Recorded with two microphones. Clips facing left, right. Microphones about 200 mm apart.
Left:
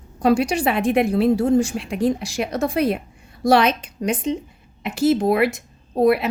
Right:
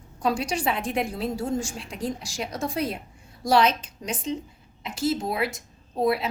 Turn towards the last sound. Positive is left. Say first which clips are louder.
# left 7 dB
turn(degrees=65)  # may be behind; listen again after turning